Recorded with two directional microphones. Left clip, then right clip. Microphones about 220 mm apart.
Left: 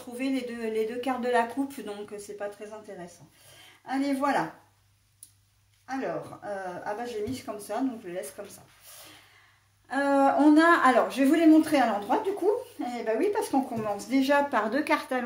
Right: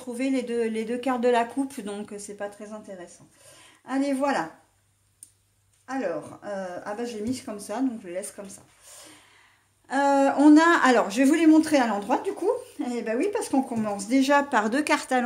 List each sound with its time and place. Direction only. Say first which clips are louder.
0.2 s speech: right 5 dB; 40° right (ahead or behind)
3.8 s speech: right 2 dB; 45° right (ahead or behind)
5.9 s speech: right 3 dB; 40° right (ahead or behind)
9.8 s speech: right 2 dB; 45° right (ahead or behind)